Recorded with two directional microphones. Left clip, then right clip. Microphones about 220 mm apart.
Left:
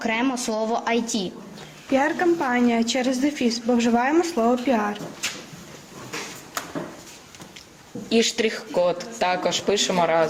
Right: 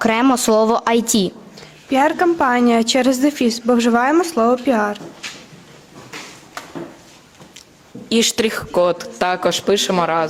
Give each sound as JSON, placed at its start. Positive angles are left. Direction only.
{"t": 0.0, "sound": "a woman's voice", "side_deg": -45}
{"t": 8.1, "sound": "a woman's voice", "side_deg": -50}